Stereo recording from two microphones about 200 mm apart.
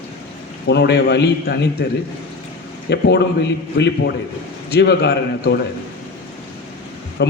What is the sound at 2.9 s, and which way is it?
A man's voice, 55° left (ahead or behind).